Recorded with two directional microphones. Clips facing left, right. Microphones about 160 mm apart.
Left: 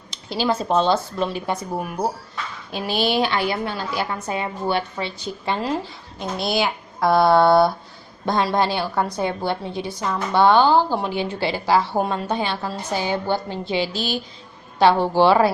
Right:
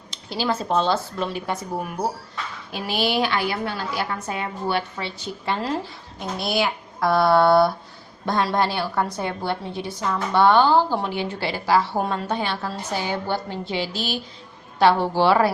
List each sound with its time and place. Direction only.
0.3 s a woman's voice: 20° left (ahead or behind)
2.7 s a woman's voice: 25° left (ahead or behind)